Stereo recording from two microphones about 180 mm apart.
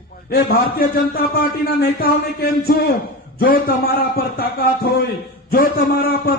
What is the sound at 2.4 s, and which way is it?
A man's voice, 60° left (ahead or behind).